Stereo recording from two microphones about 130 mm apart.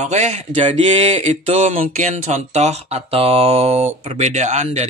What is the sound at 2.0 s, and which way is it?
Speech, 65° right (ahead or behind).